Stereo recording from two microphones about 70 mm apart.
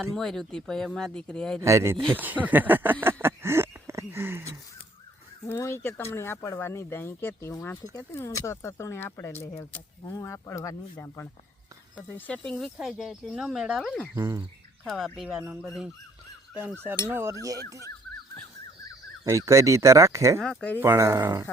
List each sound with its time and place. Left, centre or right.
0.1 s speech: centre
1.6 s speech: right
2.0 s a sound: right
5.5 s speech: left
8.3 s speech: left
12.3 s speech: centre
12.8 s speech: centre
14.2 s speech: right
14.8 s speech: centre
16.8 s speech: right
19.2 s speech: right
20.4 s speech: centre
20.8 s speech: right